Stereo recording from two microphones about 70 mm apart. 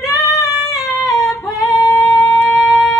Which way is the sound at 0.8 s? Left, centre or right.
Left.